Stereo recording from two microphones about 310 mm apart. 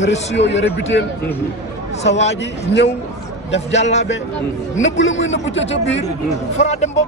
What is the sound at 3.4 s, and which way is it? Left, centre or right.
A man's voice, left.